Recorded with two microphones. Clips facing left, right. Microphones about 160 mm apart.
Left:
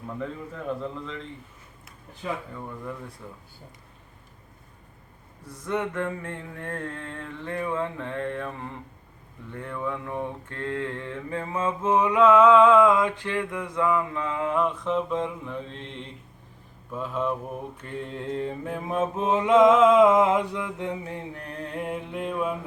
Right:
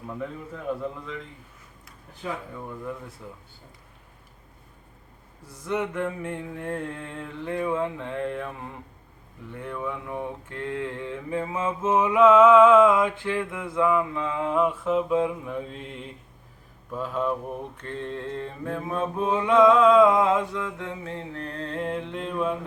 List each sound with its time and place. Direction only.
1.0 s mantra: 5° right (ahead or behind)
5.6 s mantra: 10° right (ahead or behind)
17.8 s mantra: 10° left (ahead or behind)